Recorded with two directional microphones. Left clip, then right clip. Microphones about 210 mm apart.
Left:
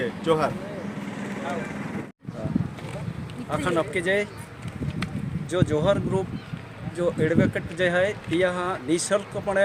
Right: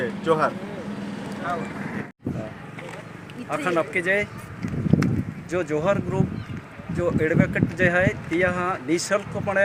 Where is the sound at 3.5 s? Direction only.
10° left (ahead or behind).